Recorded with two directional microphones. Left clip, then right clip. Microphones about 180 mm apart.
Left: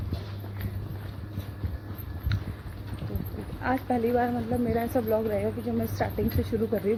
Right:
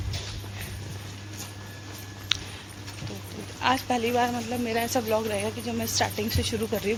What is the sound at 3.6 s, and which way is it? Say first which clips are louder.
Speech: right 2 dB; 20° right (ahead or behind).